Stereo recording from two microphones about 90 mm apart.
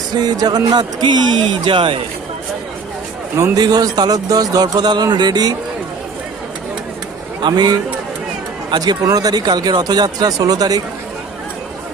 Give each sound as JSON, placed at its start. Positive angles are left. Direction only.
{"t": 0.1, "sound": "speech", "side_deg": -50}
{"t": 3.5, "sound": "speech", "side_deg": -45}
{"t": 7.4, "sound": "speech", "side_deg": -55}